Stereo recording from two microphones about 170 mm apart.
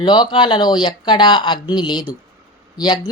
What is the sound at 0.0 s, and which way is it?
Speech, 25° left (ahead or behind).